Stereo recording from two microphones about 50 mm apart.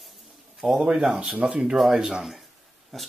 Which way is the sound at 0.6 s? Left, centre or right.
Right.